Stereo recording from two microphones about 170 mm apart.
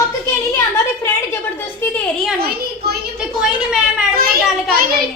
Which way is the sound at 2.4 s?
70° right (ahead or behind).